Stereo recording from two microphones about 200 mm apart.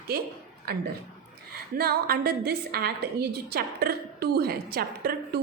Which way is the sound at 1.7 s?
50° right (ahead or behind).